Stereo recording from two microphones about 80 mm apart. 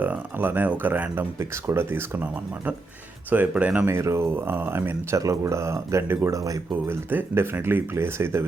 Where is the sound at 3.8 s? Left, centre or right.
Right.